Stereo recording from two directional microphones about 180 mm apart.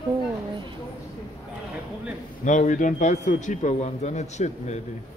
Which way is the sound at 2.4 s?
45° left (ahead or behind).